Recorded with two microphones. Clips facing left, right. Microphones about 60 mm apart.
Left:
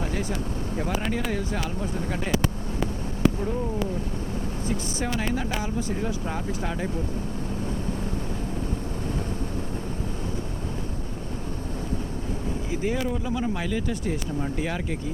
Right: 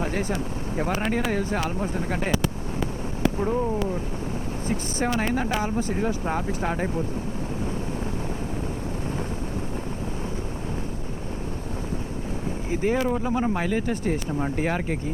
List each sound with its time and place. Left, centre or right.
0.0 s a sound: right
0.8 s speech: right
4.7 s speech: right
12.7 s speech: right